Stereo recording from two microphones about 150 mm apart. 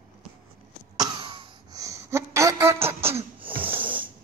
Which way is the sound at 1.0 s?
30° right (ahead or behind).